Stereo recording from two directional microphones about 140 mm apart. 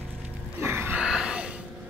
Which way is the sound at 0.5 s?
15° right (ahead or behind).